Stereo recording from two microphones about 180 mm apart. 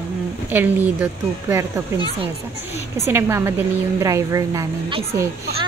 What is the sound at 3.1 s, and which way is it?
A woman's voice, 15° right (ahead or behind).